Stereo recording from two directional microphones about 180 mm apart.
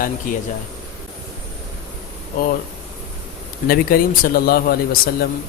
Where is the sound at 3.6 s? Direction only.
55° left (ahead or behind).